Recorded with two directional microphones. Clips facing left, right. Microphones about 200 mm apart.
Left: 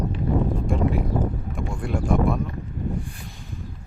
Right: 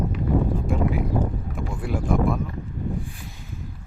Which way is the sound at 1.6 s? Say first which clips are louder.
Even; 5° right (ahead or behind).